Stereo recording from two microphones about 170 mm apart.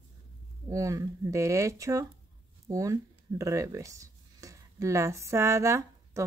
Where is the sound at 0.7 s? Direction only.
20° right (ahead or behind).